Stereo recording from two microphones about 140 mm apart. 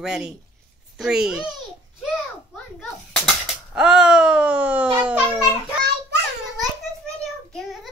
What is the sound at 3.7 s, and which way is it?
Speech, 5° right (ahead or behind).